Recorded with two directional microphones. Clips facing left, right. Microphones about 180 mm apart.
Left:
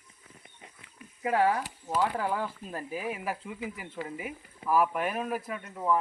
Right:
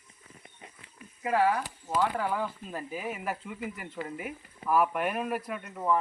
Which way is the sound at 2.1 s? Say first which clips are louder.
Even; centre (ahead or behind).